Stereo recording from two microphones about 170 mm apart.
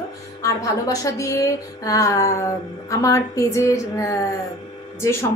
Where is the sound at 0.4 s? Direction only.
20° left (ahead or behind).